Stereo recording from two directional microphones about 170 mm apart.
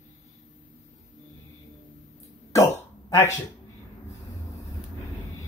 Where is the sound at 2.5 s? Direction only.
15° left (ahead or behind).